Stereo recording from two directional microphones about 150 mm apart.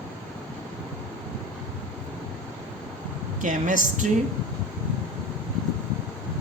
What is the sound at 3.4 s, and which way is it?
Speech, 60° right (ahead or behind).